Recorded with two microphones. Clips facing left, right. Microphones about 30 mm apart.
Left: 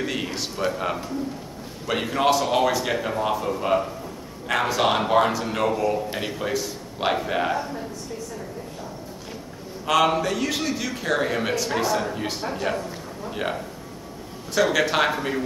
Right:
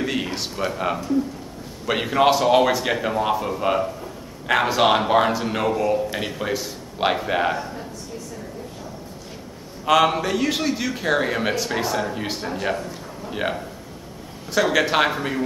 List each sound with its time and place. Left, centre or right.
0.0 s a man's voice: centre
9.8 s a man's voice: centre